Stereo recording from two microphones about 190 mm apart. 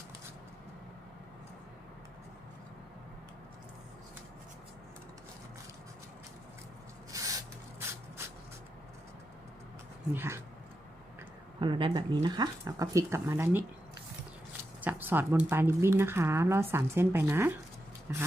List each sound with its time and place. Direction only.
7.1 s a sound: 15° right (ahead or behind)
10.1 s speech: 15° right (ahead or behind)
11.6 s speech: 25° right (ahead or behind)
14.8 s speech: 10° right (ahead or behind)